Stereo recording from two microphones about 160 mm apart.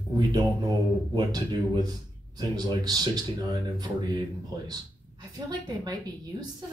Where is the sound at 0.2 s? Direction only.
25° right (ahead or behind).